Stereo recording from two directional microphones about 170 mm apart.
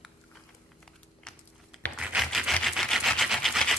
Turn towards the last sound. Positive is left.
turn(degrees=0)  # may be behind; listen again after turning